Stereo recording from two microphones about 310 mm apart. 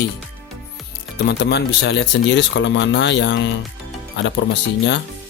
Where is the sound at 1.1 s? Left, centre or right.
Left.